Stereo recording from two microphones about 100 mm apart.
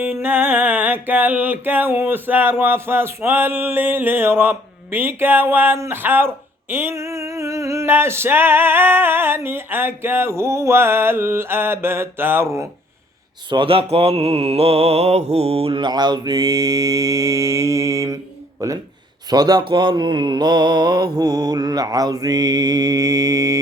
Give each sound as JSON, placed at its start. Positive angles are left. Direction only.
{"t": 0.0, "sound": "music", "side_deg": -15}
{"t": 13.5, "sound": "mantra", "side_deg": -65}